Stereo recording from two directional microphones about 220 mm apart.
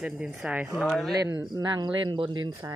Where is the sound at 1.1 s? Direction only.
15° right (ahead or behind).